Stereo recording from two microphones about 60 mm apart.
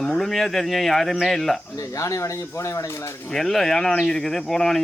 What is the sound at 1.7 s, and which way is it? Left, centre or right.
Speech, left.